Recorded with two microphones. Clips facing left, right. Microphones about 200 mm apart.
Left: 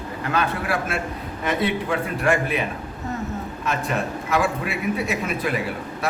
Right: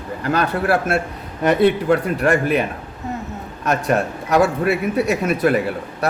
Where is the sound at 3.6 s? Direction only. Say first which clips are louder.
Right 7 dB; 45° right (ahead or behind).